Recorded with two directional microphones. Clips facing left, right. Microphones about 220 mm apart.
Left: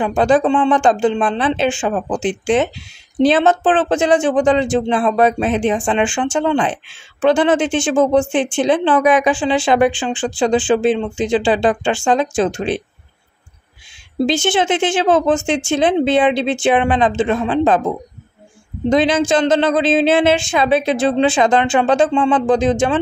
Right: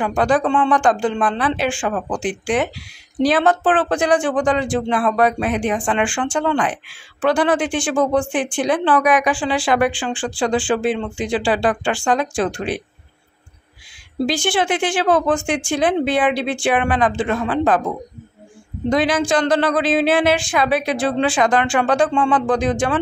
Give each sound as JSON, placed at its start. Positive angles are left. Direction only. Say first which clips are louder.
{"t": 0.0, "sound": "speech", "louder": "left 4 dB", "side_deg": 25}
{"t": 14.2, "sound": "speech", "louder": "left 3 dB", "side_deg": 25}